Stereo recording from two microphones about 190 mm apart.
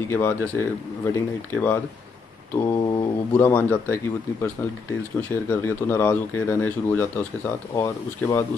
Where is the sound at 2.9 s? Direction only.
10° left (ahead or behind).